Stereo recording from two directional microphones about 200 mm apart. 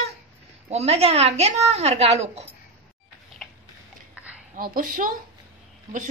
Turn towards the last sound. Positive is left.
turn(degrees=-45)  # may be behind; listen again after turning